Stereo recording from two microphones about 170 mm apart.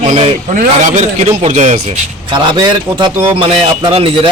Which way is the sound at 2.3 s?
25° right (ahead or behind).